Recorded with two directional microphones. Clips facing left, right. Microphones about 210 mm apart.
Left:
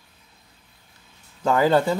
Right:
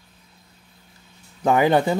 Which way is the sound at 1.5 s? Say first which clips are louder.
Right 1 dB; 20° right (ahead or behind).